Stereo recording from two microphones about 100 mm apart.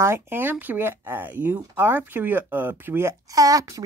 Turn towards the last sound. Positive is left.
turn(degrees=-35)  # may be behind; listen again after turning